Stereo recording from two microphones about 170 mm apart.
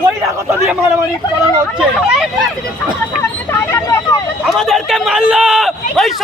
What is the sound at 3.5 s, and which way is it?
Vehicle, 15° left (ahead or behind).